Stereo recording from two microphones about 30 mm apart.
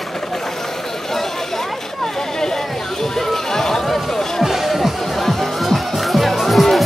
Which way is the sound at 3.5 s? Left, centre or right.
Centre.